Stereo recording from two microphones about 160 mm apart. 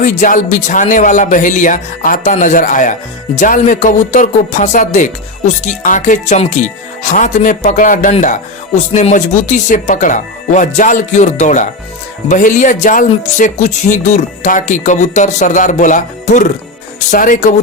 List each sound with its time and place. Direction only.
0.0 s speech: 55° left (ahead or behind)